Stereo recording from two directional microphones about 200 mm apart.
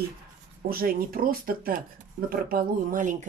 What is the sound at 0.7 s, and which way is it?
Speech, 45° right (ahead or behind).